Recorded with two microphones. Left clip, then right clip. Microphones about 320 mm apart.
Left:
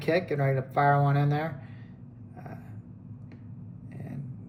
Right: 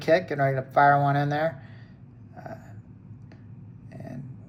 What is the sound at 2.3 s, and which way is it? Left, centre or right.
Vehicle, centre.